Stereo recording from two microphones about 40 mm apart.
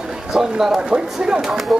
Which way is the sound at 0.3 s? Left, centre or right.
Centre.